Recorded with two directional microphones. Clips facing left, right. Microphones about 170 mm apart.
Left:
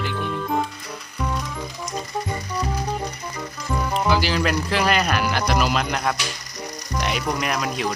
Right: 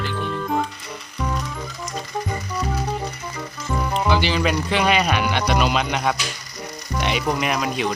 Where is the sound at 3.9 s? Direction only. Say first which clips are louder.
Right 1 dB; centre (ahead or behind).